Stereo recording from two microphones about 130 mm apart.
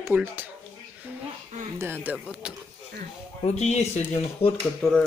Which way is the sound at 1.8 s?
15° right (ahead or behind).